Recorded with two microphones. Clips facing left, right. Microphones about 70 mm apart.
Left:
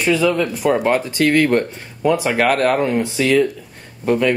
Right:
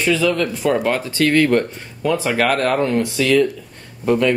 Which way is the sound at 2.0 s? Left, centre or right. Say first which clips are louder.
Left 2 dB; centre.